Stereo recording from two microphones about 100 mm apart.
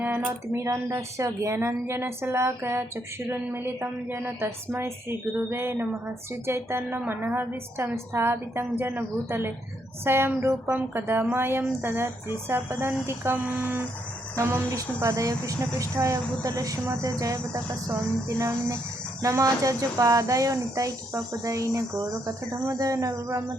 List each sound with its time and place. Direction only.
0.0 s speech: 15° right (ahead or behind)
0.5 s a woman's voice: 30° right (ahead or behind)
14.8 s speech: 35° right (ahead or behind)
19.2 s speech: 35° right (ahead or behind)